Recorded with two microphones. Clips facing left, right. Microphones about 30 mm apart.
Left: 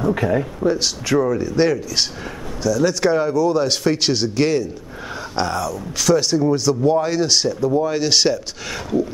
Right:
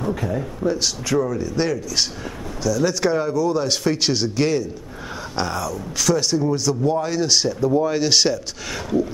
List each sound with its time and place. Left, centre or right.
0.1 s speech: left
0.6 s speech: centre